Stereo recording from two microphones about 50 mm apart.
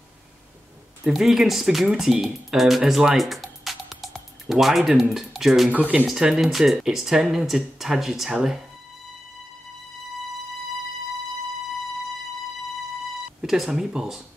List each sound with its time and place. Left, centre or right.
1.0 s speech: centre
2.8 s music: centre
4.5 s speech: centre
5.7 s speech: right
6.1 s speech: centre
13.4 s speech: centre